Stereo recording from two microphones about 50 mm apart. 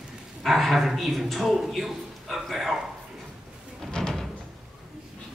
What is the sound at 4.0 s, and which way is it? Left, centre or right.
Door, centre.